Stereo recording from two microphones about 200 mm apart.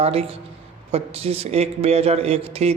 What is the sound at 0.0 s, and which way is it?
Speech, 30° right (ahead or behind).